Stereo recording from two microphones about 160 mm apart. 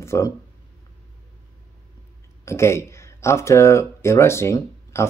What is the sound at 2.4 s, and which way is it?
Speech, 15° left (ahead or behind).